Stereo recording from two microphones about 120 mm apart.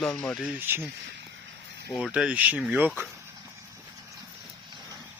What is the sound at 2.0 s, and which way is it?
Speech, 10° right (ahead or behind).